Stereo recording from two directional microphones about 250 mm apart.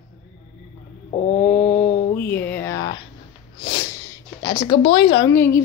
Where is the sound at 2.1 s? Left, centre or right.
Centre.